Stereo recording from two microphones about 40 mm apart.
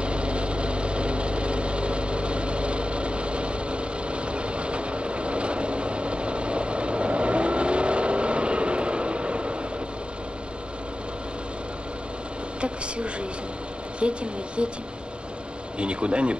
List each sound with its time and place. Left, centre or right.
0.0 s vehicle: right
12.5 s a sound: right
14.0 s speech: right
15.8 s speech: right